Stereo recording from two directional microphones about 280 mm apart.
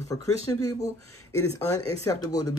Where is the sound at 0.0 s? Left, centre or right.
Centre.